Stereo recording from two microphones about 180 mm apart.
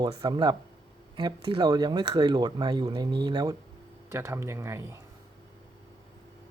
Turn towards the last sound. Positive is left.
turn(degrees=-15)  # may be behind; listen again after turning